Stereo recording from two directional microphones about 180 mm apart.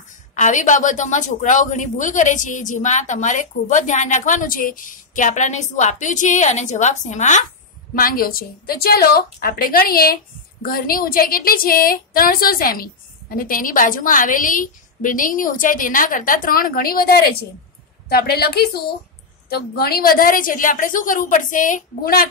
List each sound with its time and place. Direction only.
0.3 s a woman's voice: 45° left (ahead or behind)